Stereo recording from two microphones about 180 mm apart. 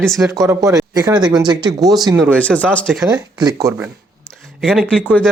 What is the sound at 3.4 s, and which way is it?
Speech, 20° right (ahead or behind).